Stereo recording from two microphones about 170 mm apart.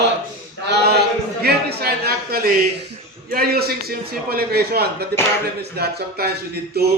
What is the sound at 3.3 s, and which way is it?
A man's voice, 65° right (ahead or behind).